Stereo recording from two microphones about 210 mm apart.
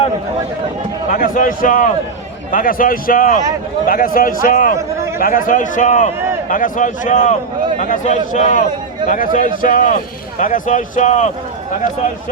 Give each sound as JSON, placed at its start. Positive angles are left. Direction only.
{"t": 1.1, "sound": "speech", "side_deg": 40}
{"t": 4.8, "sound": "a sound", "side_deg": -10}
{"t": 5.2, "sound": "speech", "side_deg": 40}